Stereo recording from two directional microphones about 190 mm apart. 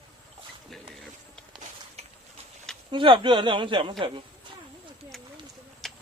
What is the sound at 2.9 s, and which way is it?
Speech, 25° right (ahead or behind).